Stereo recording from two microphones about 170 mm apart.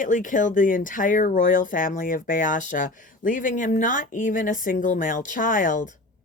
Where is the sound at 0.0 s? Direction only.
50° left (ahead or behind).